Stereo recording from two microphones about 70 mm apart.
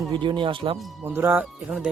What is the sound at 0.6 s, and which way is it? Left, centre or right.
Speech, right.